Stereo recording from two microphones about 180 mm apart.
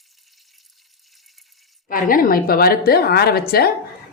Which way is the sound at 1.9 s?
50° left (ahead or behind).